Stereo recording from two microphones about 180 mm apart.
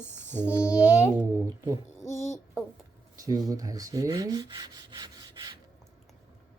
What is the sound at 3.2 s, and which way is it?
Rub, 20° right (ahead or behind).